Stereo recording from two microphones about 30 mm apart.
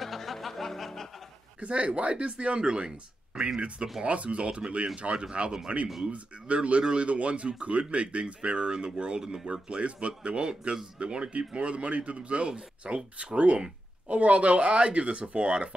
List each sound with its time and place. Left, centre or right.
0.0 s music: centre
1.6 s speech: right
4.0 s speech: right
4.4 s speech: right
5.7 s speech: right
6.8 s speech: right
7.1 s speech: right
9.2 s speech: centre
9.5 s speech: right